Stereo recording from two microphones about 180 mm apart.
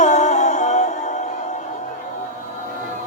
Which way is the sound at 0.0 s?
40° left (ahead or behind).